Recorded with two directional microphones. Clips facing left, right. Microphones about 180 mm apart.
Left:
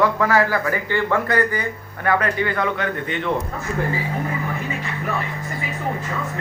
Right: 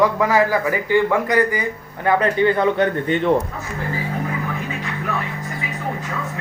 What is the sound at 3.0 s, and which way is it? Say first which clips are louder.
Speech: right 6 dB; 40° right (ahead or behind).